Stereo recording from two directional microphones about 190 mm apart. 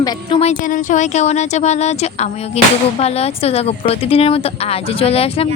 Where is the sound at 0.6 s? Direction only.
45° left (ahead or behind).